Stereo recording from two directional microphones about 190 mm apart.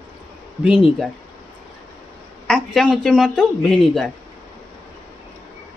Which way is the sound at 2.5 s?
Centre (ahead or behind).